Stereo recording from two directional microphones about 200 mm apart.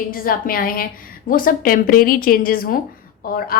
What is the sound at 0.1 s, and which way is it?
A woman's voice, 45° left (ahead or behind).